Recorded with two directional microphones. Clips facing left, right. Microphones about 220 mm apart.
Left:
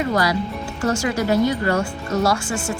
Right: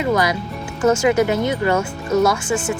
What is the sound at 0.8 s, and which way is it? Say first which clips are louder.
A woman's voice: right 6 dB; 20° right (ahead or behind).